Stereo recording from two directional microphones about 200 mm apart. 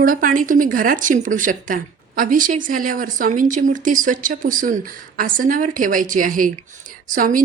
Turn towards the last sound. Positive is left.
turn(degrees=-40)  # may be behind; listen again after turning